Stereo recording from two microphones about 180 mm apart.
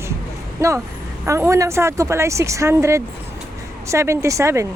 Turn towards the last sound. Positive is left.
turn(degrees=-15)  # may be behind; listen again after turning